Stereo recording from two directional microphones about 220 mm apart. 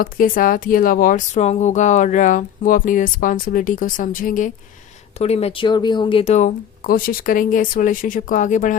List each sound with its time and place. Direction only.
0.0 s speech: 40° left (ahead or behind)